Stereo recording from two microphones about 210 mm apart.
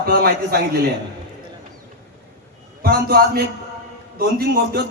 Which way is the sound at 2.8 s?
45° right (ahead or behind).